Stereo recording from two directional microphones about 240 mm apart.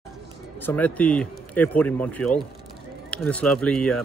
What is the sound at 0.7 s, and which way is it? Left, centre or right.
Speech, centre.